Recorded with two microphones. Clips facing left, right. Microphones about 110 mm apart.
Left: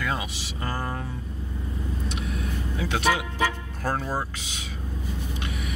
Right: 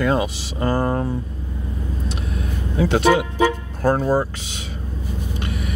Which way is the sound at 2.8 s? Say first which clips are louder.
Right 9 dB; 30° right (ahead or behind).